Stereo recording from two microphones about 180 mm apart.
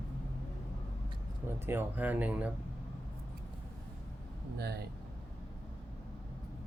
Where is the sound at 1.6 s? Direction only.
10° right (ahead or behind).